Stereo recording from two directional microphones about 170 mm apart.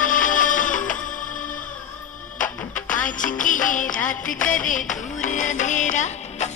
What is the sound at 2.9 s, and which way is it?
Music, 50° left (ahead or behind).